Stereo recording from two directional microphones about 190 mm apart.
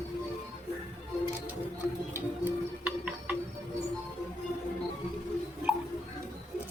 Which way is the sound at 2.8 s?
5° right (ahead or behind).